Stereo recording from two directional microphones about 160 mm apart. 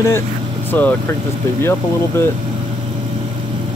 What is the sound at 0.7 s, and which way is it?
Speech, 10° left (ahead or behind).